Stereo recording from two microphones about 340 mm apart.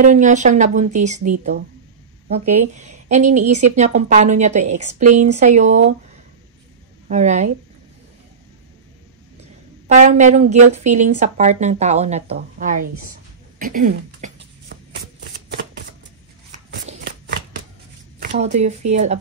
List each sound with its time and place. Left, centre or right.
0.0 s a woman's voice: right
7.1 s a woman's voice: right
9.8 s a woman's voice: right
13.6 s shuffling cards: right
16.8 s a sound: right
18.2 s a woman's voice: right